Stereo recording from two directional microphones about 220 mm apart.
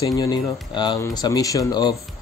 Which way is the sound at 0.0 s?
15° left (ahead or behind).